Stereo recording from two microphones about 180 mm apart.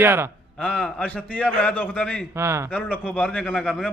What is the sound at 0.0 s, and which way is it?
Speech, 10° right (ahead or behind).